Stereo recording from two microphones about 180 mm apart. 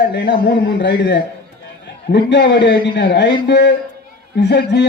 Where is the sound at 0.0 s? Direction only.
65° left (ahead or behind).